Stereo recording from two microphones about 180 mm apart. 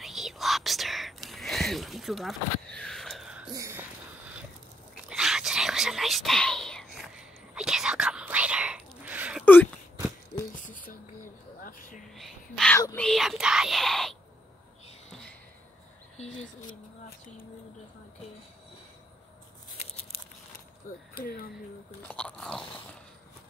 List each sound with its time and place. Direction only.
0.0 s whispering: centre (ahead or behind)
3.5 s speech: 15° right (ahead or behind)
5.1 s whispering: 5° right (ahead or behind)
9.4 s a sound: 10° left (ahead or behind)
10.5 s a sound: 50° left (ahead or behind)
12.1 s whispering: centre (ahead or behind)
12.7 s a sound: 10° left (ahead or behind)
21.2 s speech: 55° left (ahead or behind)
22.0 s biting: 5° left (ahead or behind)